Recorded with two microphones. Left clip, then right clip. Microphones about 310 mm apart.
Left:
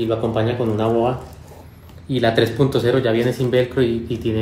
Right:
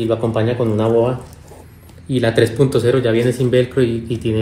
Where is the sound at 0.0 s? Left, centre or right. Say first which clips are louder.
Right 2 dB; centre.